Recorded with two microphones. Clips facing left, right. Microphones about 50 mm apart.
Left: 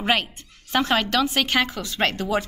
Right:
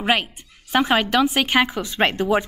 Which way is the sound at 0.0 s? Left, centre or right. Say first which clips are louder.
Right 2 dB; centre.